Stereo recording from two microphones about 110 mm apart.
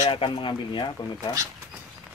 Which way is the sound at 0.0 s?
55° left (ahead or behind).